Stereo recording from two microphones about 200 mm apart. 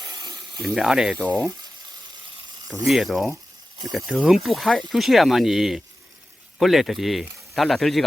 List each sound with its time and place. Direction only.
0.0 s a sound: 20° right (ahead or behind)
0.6 s speech: centre (ahead or behind)
2.8 s speech: centre (ahead or behind)